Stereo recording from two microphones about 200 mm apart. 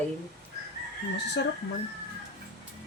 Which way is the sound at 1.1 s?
60° left (ahead or behind).